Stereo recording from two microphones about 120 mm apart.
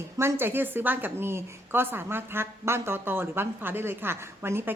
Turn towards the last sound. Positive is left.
turn(degrees=-20)  # may be behind; listen again after turning